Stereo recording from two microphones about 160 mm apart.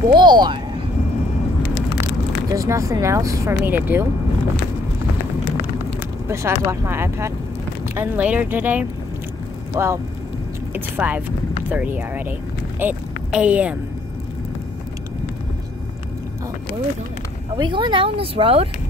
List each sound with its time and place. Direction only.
0.1 s speech: 30° right (ahead or behind)
2.5 s speech: 20° right (ahead or behind)
6.2 s speech: 15° right (ahead or behind)
17.6 s speech: 30° right (ahead or behind)